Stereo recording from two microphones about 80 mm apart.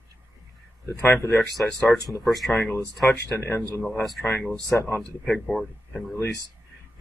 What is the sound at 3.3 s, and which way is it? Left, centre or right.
Speech, left.